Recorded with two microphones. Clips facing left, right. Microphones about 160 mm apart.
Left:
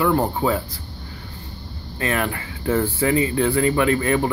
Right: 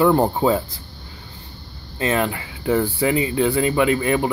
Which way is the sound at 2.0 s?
20° right (ahead or behind).